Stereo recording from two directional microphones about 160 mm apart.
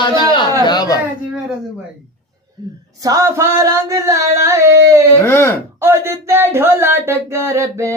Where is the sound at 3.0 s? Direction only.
20° right (ahead or behind).